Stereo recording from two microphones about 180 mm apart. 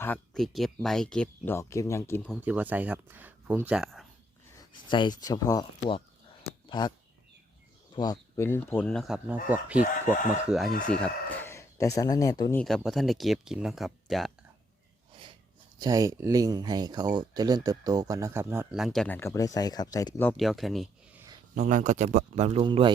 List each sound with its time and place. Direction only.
0.0 s speech: 5° left (ahead or behind)
2.4 s speech: 10° right (ahead or behind)
4.5 s speech: 25° left (ahead or behind)
6.7 s speech: 25° left (ahead or behind)
7.9 s speech: 20° left (ahead or behind); by 10.7 s 5° right (ahead or behind)
10.8 s speech: 10° left (ahead or behind)
12.5 s speech: 5° left (ahead or behind)
15.8 s speech: 20° right (ahead or behind)
18.7 s speech: centre (ahead or behind)
19.0 s speech: 15° left (ahead or behind)
20.3 s speech: centre (ahead or behind)
21.5 s speech: 45° right (ahead or behind); by 22.9 s 30° right (ahead or behind)